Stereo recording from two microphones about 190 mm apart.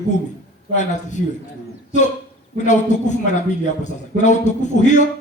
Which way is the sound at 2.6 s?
40° left (ahead or behind).